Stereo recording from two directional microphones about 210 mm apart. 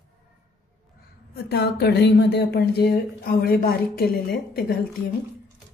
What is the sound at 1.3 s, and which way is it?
Speech, 50° left (ahead or behind).